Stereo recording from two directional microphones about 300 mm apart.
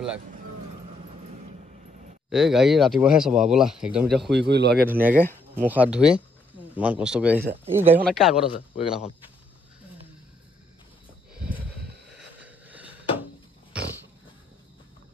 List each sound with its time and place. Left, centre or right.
2.2 s speech: centre
4.3 s speech: right
4.8 s speech: centre
5.2 s speech: centre
5.7 s speech: centre
8.5 s a man's voice: centre
11.3 s a sound: centre
12.1 s vehicle: centre